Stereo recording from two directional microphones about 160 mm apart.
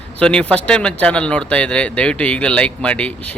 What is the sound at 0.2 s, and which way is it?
Speech, 5° left (ahead or behind).